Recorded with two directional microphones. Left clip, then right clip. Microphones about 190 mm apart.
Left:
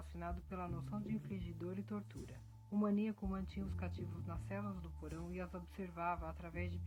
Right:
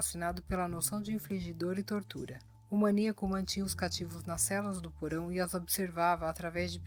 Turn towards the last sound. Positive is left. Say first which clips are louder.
# right 13 dB
turn(degrees=-50)  # may be behind; listen again after turning